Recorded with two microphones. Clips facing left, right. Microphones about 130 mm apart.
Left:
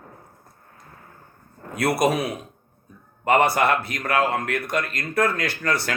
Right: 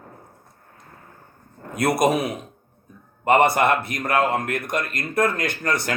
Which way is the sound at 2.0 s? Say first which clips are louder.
Right 1 dB; 20° right (ahead or behind).